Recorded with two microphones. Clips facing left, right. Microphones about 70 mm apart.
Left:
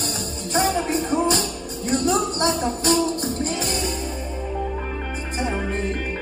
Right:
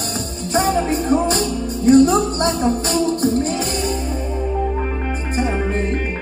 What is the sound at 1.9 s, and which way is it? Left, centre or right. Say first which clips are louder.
Music: right 9 dB; right.